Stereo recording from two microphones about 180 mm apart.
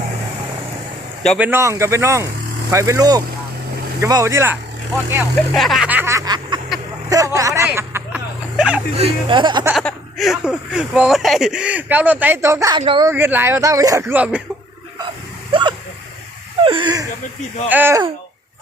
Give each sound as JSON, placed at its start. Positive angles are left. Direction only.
{"t": 1.4, "sound": "speech", "side_deg": -15}
{"t": 5.5, "sound": "snicker", "side_deg": 0}
{"t": 7.1, "sound": "vehicle", "side_deg": -20}
{"t": 9.0, "sound": "speech", "side_deg": -30}
{"t": 9.7, "sound": "speech", "side_deg": 0}
{"t": 13.1, "sound": "speech", "side_deg": -10}
{"t": 15.5, "sound": "vehicle", "side_deg": -30}
{"t": 16.6, "sound": "a sound", "side_deg": -25}
{"t": 17.7, "sound": "speech", "side_deg": -10}